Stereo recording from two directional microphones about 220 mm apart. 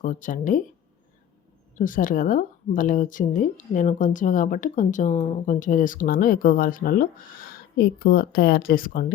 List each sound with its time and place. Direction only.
0.0 s speech: 35° left (ahead or behind)
1.8 s speech: 40° left (ahead or behind)